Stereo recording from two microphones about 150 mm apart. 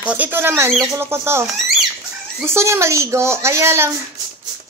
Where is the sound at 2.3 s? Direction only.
15° right (ahead or behind).